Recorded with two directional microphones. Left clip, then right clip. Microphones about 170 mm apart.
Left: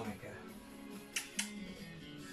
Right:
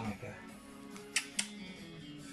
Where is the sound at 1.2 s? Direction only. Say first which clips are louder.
Right 6 dB; 30° right (ahead or behind).